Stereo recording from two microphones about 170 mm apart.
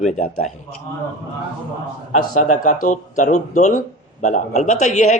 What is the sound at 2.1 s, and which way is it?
Speech, 45° left (ahead or behind).